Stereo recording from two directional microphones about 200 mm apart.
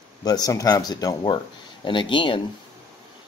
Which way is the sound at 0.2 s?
20° left (ahead or behind).